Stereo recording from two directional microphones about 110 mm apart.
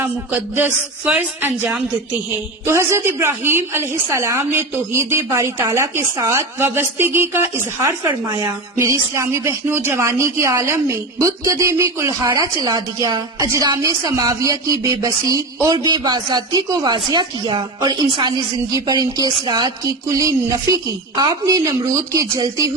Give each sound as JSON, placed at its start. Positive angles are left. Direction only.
{"t": 0.0, "sound": "a woman's voice", "side_deg": -20}